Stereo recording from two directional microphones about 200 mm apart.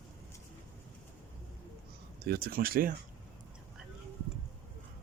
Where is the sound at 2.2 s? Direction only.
50° right (ahead or behind).